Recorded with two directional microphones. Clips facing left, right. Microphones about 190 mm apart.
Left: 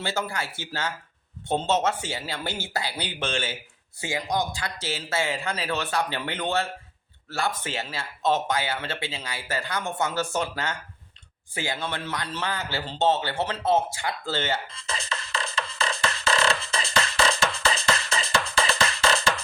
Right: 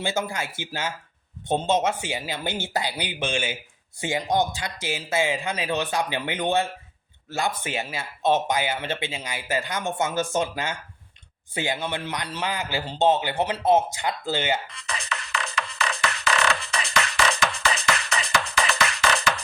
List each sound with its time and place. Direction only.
0.0 s speech: 15° right (ahead or behind)
14.7 s music: 30° left (ahead or behind)